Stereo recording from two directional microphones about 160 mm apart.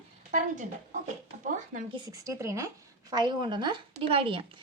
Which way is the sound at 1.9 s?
20° right (ahead or behind).